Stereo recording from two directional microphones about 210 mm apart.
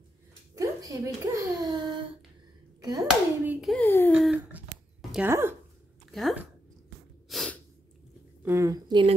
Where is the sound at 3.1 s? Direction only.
Centre (ahead or behind).